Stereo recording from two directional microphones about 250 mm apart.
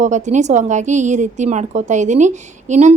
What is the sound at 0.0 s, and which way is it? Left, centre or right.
A woman's voice, right.